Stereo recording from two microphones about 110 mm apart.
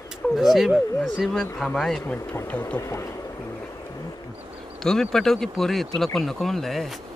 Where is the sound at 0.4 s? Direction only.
5° right (ahead or behind).